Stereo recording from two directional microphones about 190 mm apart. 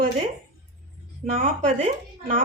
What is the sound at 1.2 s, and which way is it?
Speech, 40° right (ahead or behind).